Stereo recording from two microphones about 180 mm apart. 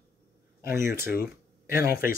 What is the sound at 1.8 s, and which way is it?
Speech, 55° left (ahead or behind).